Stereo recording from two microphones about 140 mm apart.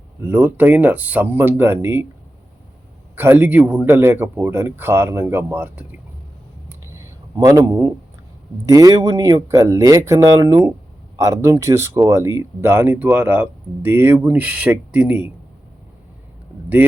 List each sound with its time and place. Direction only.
0.2 s speech: 15° right (ahead or behind)
3.2 s speech: 15° right (ahead or behind)
6.7 s a sound: 20° right (ahead or behind)
8.6 s speech: 25° right (ahead or behind)